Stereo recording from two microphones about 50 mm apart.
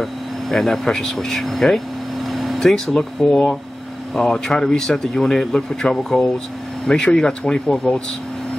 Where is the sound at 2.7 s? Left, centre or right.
Centre.